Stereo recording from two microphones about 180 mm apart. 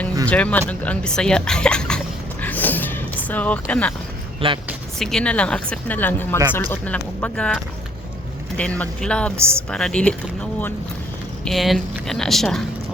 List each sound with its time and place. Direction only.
0.3 s speech: 10° left (ahead or behind)
2.4 s a sound: 10° left (ahead or behind)
4.4 s speech: 30° right (ahead or behind)
4.9 s speech: 5° left (ahead or behind)
9.4 s a woman's voice: 15° right (ahead or behind)
9.6 s speech: 5° left (ahead or behind)
11.4 s speech: centre (ahead or behind)